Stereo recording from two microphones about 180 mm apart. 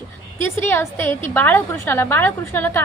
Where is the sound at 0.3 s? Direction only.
10° left (ahead or behind).